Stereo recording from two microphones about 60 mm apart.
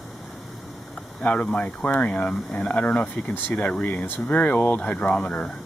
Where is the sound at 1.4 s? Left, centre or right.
Centre.